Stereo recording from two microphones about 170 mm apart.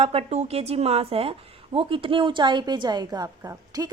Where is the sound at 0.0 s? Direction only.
35° right (ahead or behind).